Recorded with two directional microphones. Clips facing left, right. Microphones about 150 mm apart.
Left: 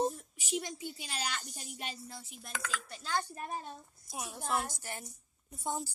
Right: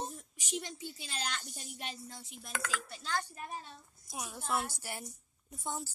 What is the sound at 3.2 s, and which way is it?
Speech, 40° left (ahead or behind).